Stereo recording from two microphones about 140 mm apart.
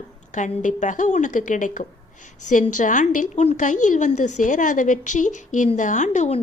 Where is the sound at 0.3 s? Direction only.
60° left (ahead or behind).